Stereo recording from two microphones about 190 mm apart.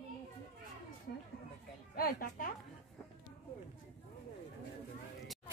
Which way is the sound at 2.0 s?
50° left (ahead or behind).